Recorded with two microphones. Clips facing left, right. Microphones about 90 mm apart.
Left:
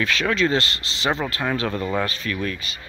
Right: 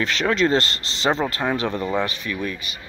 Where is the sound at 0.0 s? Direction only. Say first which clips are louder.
Right 1 dB; 25° right (ahead or behind).